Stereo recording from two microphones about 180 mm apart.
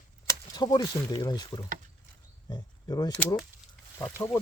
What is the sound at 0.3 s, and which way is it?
Speech, 25° left (ahead or behind).